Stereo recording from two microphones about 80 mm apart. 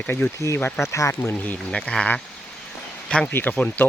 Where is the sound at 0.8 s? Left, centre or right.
Left.